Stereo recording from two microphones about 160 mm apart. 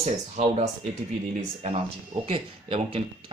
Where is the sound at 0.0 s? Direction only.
45° right (ahead or behind).